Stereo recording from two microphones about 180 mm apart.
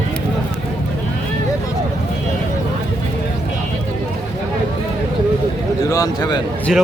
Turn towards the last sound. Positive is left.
turn(degrees=0)  # may be behind; listen again after turning